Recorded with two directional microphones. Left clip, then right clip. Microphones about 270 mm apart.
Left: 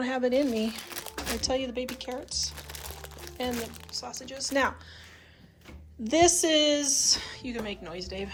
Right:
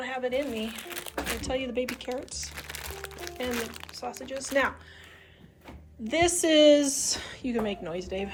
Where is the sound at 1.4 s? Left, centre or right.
Centre.